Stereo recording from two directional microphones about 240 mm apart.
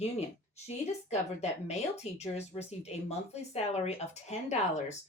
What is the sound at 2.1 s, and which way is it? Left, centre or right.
Speech, left.